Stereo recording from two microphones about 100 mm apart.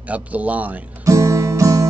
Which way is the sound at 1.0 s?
35° right (ahead or behind).